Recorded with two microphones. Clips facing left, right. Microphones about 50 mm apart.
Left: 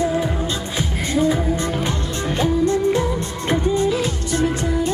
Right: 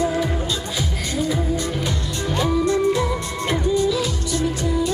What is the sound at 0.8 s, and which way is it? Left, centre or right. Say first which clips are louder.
Music: left 8 dB; left.